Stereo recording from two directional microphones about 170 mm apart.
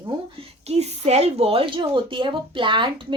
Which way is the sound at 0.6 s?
40° right (ahead or behind).